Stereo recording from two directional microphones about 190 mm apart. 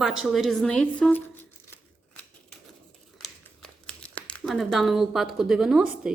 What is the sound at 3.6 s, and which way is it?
Crumpling, 5° left (ahead or behind).